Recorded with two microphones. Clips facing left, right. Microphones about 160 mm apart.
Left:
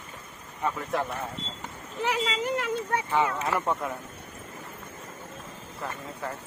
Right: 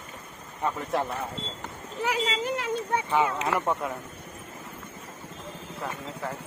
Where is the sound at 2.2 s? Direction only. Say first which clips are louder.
Even; 20° right (ahead or behind).